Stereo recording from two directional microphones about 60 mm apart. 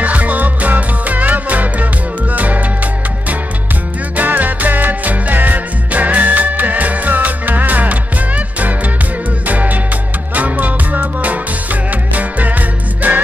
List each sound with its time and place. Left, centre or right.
0.0 s music: right
4.2 s music: right